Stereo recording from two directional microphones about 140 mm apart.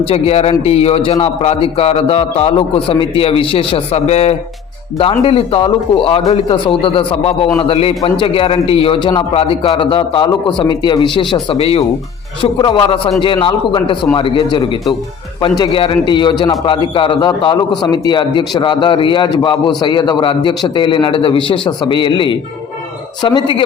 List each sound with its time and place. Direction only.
0.0 s a man's voice: 45° left (ahead or behind)